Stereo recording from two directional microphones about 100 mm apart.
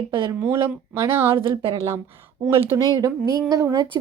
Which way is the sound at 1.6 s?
70° right (ahead or behind).